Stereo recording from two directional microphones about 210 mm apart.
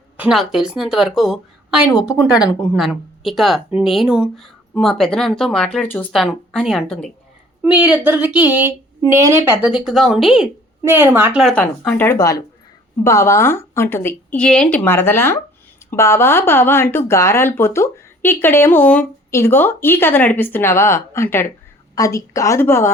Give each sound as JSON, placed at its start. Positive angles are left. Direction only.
{"t": 0.2, "sound": "speech", "side_deg": 0}
{"t": 2.3, "sound": "speech", "side_deg": 15}
{"t": 2.7, "sound": "speech", "side_deg": 0}
{"t": 7.6, "sound": "a woman's voice", "side_deg": -5}